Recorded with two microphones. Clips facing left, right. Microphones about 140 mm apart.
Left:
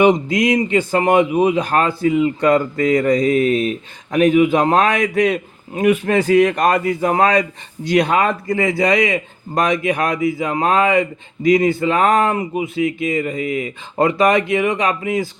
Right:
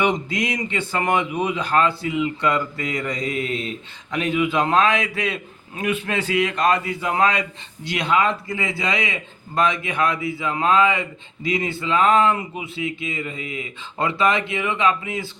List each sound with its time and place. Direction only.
0.0 s speech: 40° left (ahead or behind)
3.4 s speech: 25° right (ahead or behind)
4.1 s a man's voice: 45° left (ahead or behind)
12.7 s speech: 25° right (ahead or behind)
14.0 s a man's voice: 45° left (ahead or behind)